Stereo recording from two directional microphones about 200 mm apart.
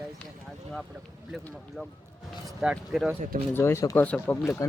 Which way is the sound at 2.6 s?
5° right (ahead or behind).